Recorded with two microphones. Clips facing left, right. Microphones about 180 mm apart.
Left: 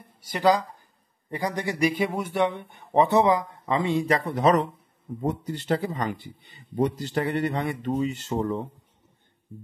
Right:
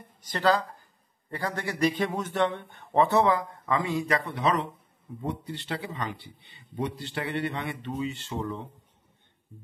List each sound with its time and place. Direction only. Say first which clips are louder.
0.2 s a man's voice: left 3 dB; 10° left (ahead or behind); by 4.2 s 30° left (ahead or behind)
4.3 s speech: left 6 dB; 45° left (ahead or behind)